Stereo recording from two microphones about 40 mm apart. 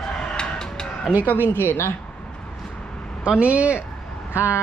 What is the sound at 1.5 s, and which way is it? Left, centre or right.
Speech, left.